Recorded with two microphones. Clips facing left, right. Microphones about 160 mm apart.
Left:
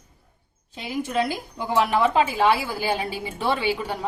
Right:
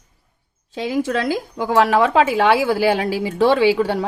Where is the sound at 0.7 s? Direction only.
90° right.